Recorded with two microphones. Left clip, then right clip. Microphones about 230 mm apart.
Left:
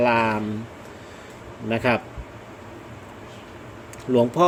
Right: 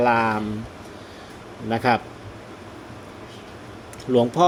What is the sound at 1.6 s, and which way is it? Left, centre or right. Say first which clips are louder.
Speech: right 1 dB; centre.